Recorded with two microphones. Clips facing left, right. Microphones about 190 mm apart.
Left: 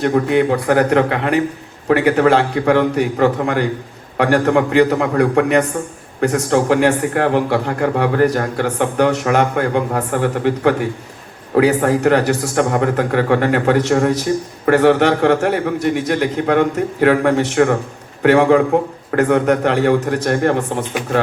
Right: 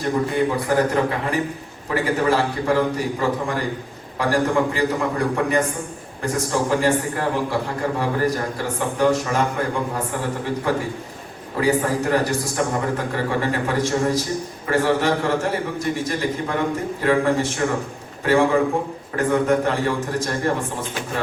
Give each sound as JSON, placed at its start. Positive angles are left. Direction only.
{"t": 0.0, "sound": "a man's voice", "side_deg": 65}